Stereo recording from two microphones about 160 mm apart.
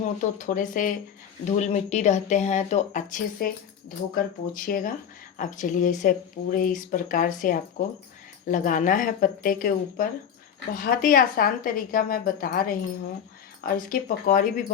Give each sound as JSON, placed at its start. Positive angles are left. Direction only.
{"t": 0.3, "sound": "speech", "side_deg": 55}